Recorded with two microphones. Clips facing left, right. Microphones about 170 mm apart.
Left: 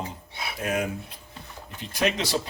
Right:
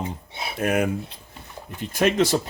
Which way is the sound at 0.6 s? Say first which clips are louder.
Right 6 dB; 60° right (ahead or behind).